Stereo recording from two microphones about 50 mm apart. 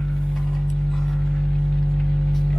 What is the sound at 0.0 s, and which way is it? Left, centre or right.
Vehicle, centre.